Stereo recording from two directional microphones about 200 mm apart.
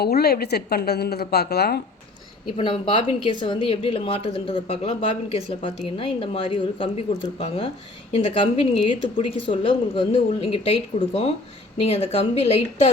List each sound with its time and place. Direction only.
0.0 s speech: 50° left (ahead or behind)
2.5 s speech: 25° left (ahead or behind)